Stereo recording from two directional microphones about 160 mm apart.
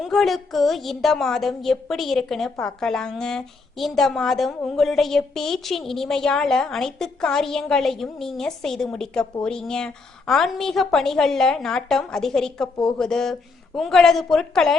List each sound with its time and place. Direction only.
0.0 s a woman's voice: centre (ahead or behind)